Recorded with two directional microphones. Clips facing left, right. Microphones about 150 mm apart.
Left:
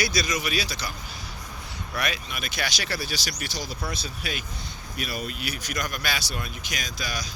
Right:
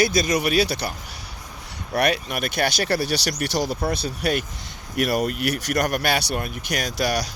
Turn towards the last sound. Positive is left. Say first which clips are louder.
# right 10 dB
turn(degrees=-70)  # may be behind; listen again after turning